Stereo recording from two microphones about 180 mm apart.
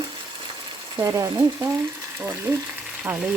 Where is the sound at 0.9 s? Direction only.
15° right (ahead or behind).